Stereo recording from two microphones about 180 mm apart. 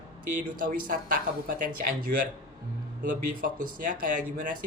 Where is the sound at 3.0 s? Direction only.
50° right (ahead or behind).